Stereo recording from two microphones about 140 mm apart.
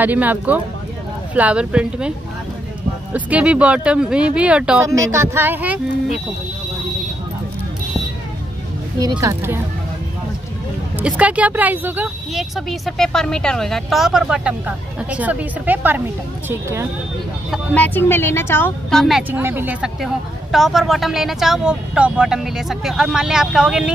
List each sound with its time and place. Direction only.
0.0 s speech: 10° right (ahead or behind)
5.1 s speech: 20° right (ahead or behind)
9.2 s speech: 20° right (ahead or behind)
11.0 s speech: 10° right (ahead or behind)
12.4 s speech: centre (ahead or behind); by 16.8 s 20° right (ahead or behind)
17.5 s speech: 10° left (ahead or behind)
18.9 s speech: centre (ahead or behind)
19.3 s speech: 15° right (ahead or behind)